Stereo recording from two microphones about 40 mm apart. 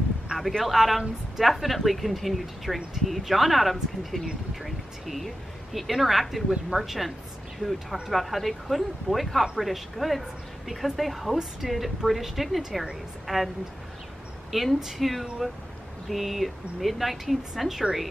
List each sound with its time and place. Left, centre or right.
0.4 s speech: centre
14.5 s speech: centre